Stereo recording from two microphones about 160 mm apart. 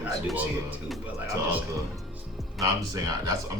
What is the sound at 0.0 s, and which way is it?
Speech, 10° right (ahead or behind).